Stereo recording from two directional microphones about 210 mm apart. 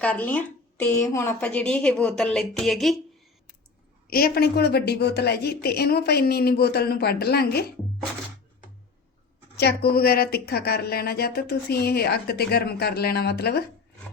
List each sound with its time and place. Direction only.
0.0 s a woman's voice: 5° left (ahead or behind)
4.1 s speech: 45° left (ahead or behind)
9.6 s speech: 50° left (ahead or behind)